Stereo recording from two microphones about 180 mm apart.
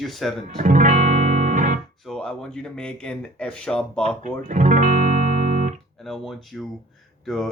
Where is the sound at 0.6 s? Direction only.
45° right (ahead or behind).